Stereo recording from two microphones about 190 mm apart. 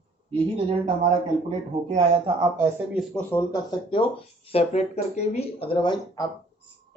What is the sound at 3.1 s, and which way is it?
Speech, 10° left (ahead or behind).